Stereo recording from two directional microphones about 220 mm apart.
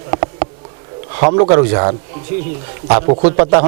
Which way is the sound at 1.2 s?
30° right (ahead or behind).